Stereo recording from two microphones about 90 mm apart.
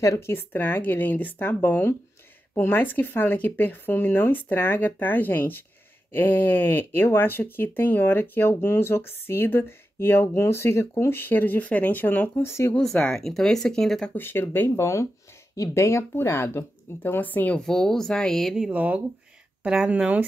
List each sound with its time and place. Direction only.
0.3 s speech: 25° left (ahead or behind)
12.7 s speech: 10° left (ahead or behind)
14.1 s speech: 25° left (ahead or behind)
17.6 s speech: 5° left (ahead or behind)
18.7 s speech: 15° right (ahead or behind)